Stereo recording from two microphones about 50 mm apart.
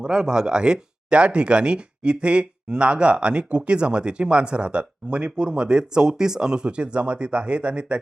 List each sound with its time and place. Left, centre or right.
0.0 s speech: centre